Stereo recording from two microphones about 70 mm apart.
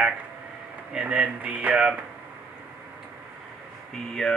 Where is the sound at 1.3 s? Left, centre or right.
Right.